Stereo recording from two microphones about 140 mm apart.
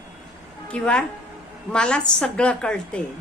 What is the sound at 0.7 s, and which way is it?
A woman's voice, 10° left (ahead or behind).